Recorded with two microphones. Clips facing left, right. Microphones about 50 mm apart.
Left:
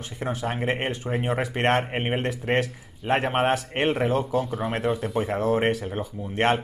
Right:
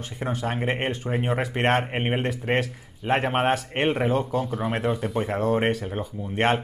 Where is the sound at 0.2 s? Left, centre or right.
Centre.